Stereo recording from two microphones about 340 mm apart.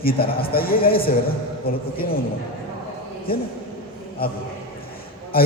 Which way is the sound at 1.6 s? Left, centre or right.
Left.